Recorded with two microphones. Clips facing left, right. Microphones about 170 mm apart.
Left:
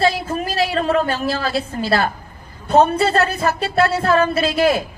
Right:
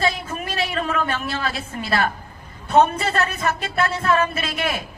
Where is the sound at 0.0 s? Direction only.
35° left (ahead or behind).